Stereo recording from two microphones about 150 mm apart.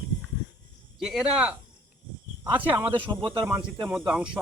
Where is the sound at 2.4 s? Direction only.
20° right (ahead or behind).